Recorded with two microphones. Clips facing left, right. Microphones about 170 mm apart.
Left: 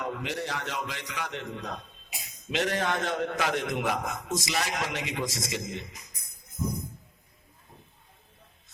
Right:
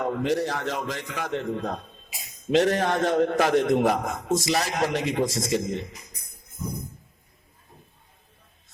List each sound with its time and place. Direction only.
0.0 s a man's voice: 40° right (ahead or behind)
6.6 s tambourine: 30° left (ahead or behind)